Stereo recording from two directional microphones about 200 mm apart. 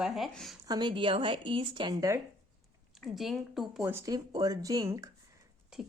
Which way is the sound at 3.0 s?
Centre (ahead or behind).